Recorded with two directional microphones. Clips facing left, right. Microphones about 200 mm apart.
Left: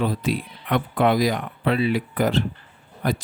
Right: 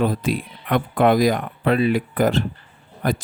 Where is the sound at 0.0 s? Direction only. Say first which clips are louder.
Right 3 dB; 50° right (ahead or behind).